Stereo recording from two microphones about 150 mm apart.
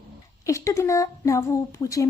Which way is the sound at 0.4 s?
20° left (ahead or behind).